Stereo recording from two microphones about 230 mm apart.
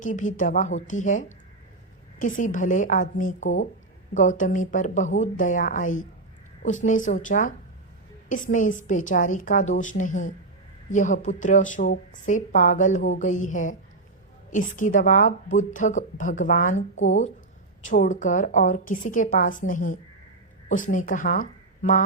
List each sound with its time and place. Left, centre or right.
0.0 s a woman's voice: left
2.4 s a woman's voice: left